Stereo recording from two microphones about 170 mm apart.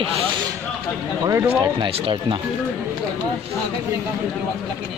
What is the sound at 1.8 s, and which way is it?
Speech, 30° right (ahead or behind).